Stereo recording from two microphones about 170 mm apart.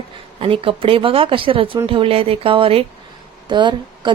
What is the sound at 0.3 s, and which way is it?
A woman's voice, 30° right (ahead or behind).